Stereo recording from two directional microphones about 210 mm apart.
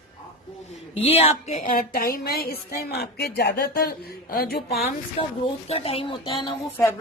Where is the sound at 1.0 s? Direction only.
30° left (ahead or behind); by 4.9 s 45° left (ahead or behind).